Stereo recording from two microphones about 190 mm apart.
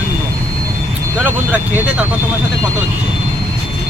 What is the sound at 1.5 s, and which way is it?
Speech, 10° right (ahead or behind).